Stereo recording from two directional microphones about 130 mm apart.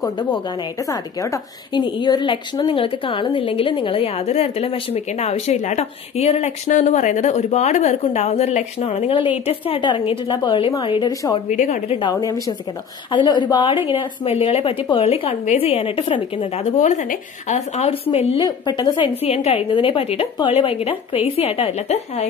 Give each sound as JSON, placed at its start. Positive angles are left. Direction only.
{"t": 0.0, "sound": "a woman's voice", "side_deg": 30}
{"t": 11.4, "sound": "a woman's voice", "side_deg": 70}
{"t": 12.1, "sound": "a woman's voice", "side_deg": 30}
{"t": 16.7, "sound": "a woman's voice", "side_deg": 70}
{"t": 18.4, "sound": "a woman's voice", "side_deg": 30}
{"t": 19.2, "sound": "a woman's voice", "side_deg": 50}